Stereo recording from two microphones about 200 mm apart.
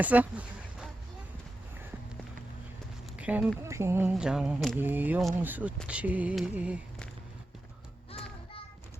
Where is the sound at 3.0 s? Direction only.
5° right (ahead or behind).